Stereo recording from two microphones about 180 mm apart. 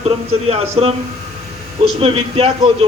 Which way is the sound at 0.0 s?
35° right (ahead or behind).